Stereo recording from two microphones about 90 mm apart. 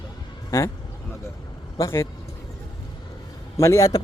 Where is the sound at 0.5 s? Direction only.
30° left (ahead or behind).